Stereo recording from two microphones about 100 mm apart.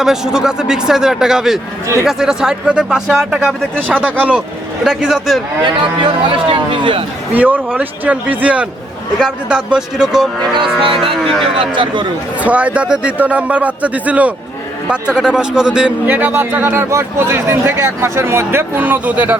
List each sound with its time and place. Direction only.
0.0 s speech: 5° right (ahead or behind)
4.0 s a man's voice: 10° right (ahead or behind)
4.8 s speech: centre (ahead or behind)
5.6 s speech: 50° right (ahead or behind)
7.3 s a man's voice: 15° right (ahead or behind)
10.6 s speech: 60° right (ahead or behind)
12.4 s a man's voice: 15° right (ahead or behind)